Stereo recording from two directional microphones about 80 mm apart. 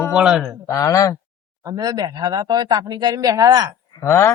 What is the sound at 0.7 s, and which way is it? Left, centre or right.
Speech, left.